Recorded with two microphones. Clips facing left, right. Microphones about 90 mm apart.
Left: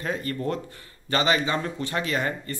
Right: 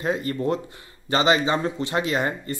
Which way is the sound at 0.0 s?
20° right (ahead or behind).